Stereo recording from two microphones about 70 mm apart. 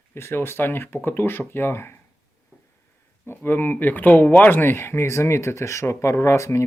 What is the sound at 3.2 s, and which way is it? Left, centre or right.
Speech, left.